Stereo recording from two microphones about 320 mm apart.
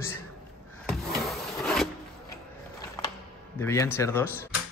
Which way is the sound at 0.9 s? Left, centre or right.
Centre.